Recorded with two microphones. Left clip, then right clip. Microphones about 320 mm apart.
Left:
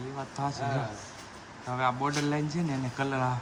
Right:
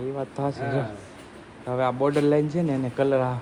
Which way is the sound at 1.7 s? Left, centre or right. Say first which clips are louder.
Right 6 dB; centre.